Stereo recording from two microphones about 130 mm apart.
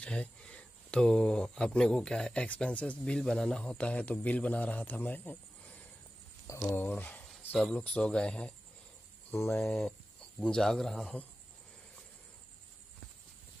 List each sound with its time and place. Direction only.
0.0 s speech: 10° left (ahead or behind)
9.3 s speech: 20° left (ahead or behind)
9.6 s a man's voice: 5° left (ahead or behind)